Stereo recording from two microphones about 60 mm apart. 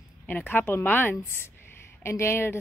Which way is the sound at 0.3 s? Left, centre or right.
Left.